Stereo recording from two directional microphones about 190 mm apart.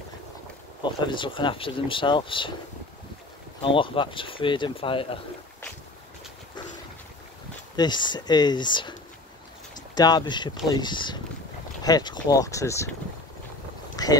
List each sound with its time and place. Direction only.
0.8 s speech: 25° left (ahead or behind)
3.6 s speech: 25° left (ahead or behind)
7.7 s speech: 25° left (ahead or behind)
9.9 s speech: 20° left (ahead or behind)
14.0 s dog: 20° left (ahead or behind)